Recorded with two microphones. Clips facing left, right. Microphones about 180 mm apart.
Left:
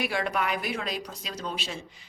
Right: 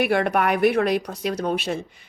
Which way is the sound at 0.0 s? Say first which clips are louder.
Right 8 dB; 60° right (ahead or behind).